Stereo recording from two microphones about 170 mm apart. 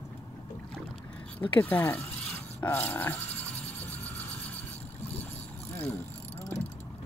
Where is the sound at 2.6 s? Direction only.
15° left (ahead or behind).